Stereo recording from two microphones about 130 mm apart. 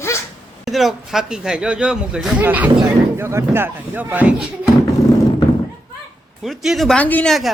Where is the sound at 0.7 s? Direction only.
Centre (ahead or behind).